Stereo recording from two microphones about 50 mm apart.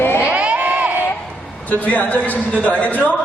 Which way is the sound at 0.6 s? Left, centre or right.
Right.